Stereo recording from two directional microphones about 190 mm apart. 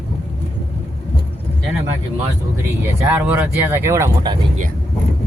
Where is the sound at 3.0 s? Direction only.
10° right (ahead or behind).